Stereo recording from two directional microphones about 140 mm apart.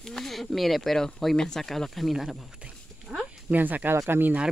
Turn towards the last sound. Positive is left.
turn(degrees=-15)  # may be behind; listen again after turning